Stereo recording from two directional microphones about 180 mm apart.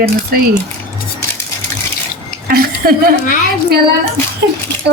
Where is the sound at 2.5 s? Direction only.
60° right (ahead or behind).